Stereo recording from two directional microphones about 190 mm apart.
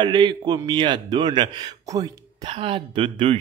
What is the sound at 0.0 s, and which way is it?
Speech, 25° right (ahead or behind).